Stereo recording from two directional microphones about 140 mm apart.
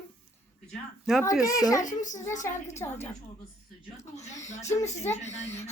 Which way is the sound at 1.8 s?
65° left (ahead or behind).